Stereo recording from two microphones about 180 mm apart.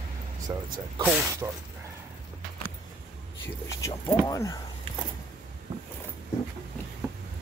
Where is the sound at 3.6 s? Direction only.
15° left (ahead or behind).